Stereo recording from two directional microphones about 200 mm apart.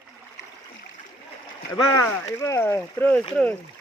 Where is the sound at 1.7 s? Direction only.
15° left (ahead or behind).